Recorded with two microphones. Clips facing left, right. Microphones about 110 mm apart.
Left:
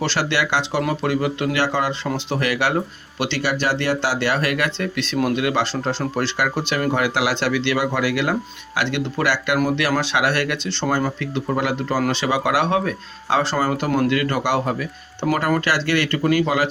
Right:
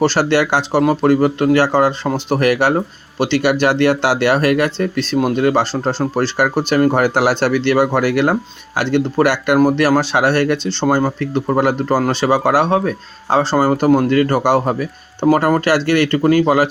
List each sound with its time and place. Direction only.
0.0 s speech: 40° right (ahead or behind)